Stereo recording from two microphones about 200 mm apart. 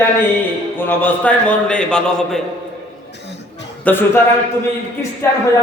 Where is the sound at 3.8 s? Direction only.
10° left (ahead or behind).